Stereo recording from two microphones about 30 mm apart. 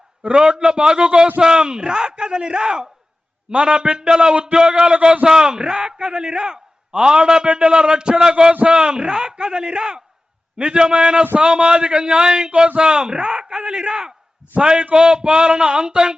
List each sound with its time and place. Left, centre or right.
0.2 s a man's voice: right
3.5 s a man's voice: right
3.9 s a man's voice: right
7.4 s a man's voice: right
10.9 s a man's voice: right
14.6 s speech: right